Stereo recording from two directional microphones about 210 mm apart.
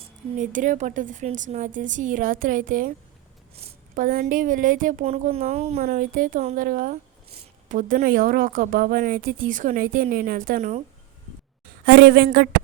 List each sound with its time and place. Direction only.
0.3 s a woman's voice: 35° right (ahead or behind)
3.5 s a sound: 30° right (ahead or behind)
4.0 s a woman's voice: 45° right (ahead or behind)
5.8 s a woman's voice: 40° right (ahead or behind)
11.9 s a woman's voice: 50° right (ahead or behind)